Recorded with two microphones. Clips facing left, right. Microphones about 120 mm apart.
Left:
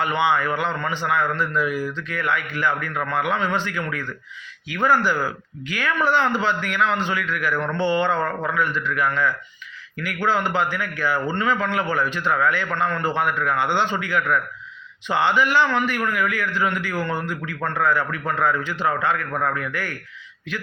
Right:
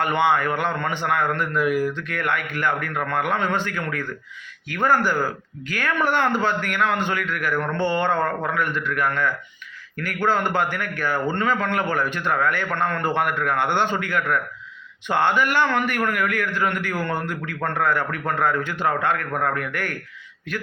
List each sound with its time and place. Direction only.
0.0 s a man's voice: 50° right (ahead or behind)